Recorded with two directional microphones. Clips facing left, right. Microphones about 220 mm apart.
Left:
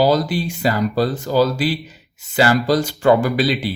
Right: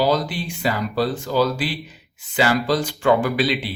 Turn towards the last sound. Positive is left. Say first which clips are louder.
# left 3 dB
turn(degrees=40)  # may be behind; listen again after turning